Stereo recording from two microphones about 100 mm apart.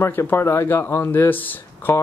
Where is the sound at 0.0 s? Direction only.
20° left (ahead or behind).